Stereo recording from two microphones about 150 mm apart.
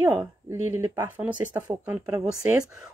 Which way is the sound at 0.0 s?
20° right (ahead or behind).